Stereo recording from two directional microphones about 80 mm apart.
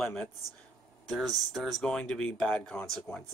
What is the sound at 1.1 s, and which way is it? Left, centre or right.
Speech, centre.